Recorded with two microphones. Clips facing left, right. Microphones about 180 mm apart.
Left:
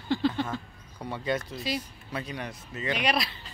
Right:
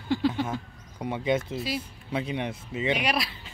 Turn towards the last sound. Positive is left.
turn(degrees=-10)  # may be behind; listen again after turning